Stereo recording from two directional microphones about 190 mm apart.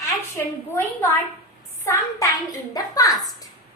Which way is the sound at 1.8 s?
15° left (ahead or behind).